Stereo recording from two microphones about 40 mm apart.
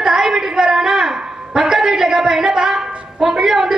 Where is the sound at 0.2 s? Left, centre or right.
Centre.